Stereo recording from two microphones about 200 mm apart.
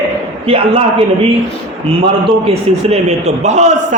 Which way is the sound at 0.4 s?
25° right (ahead or behind).